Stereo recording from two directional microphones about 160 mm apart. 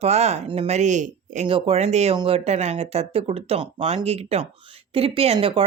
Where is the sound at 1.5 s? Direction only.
35° right (ahead or behind).